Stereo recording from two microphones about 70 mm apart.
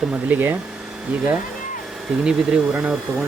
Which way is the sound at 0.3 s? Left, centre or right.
Right.